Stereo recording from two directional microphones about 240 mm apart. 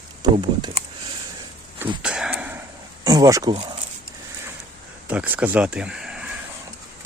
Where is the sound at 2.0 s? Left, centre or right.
Centre.